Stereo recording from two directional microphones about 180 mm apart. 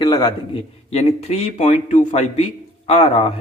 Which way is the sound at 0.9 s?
35° left (ahead or behind).